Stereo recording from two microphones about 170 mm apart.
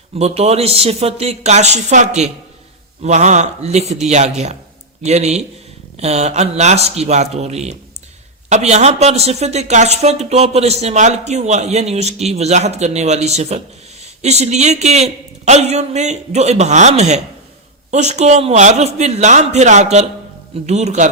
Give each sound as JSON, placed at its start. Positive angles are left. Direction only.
{"t": 0.2, "sound": "speech", "side_deg": -40}
{"t": 5.0, "sound": "speech", "side_deg": -40}